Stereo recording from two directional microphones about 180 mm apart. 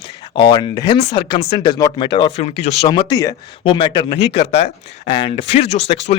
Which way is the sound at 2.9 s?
25° left (ahead or behind).